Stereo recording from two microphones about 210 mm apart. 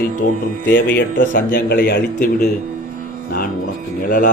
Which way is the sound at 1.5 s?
50° left (ahead or behind).